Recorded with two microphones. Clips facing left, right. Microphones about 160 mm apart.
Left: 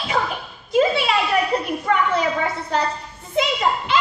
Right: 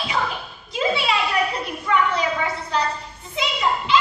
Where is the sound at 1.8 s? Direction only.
50° left (ahead or behind).